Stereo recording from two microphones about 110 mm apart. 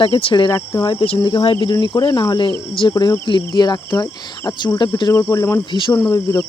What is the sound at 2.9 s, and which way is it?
Speech, 40° left (ahead or behind).